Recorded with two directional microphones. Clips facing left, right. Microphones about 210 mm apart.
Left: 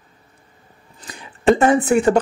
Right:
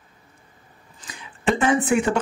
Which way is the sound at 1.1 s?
40° left (ahead or behind).